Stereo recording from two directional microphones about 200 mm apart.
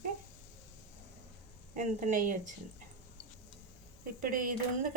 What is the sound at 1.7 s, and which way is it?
Speech, 40° right (ahead or behind).